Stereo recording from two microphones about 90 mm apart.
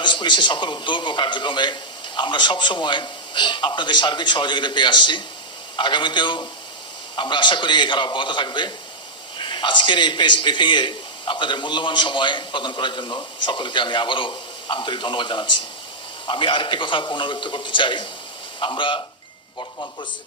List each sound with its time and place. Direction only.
0.0 s a man's voice: 60° left (ahead or behind)
19.5 s speech: 50° left (ahead or behind)